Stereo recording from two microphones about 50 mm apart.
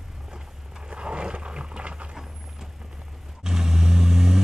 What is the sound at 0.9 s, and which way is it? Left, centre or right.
Roaring cats, right.